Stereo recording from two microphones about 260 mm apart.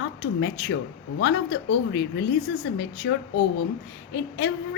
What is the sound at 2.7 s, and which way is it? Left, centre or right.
A woman's voice, left.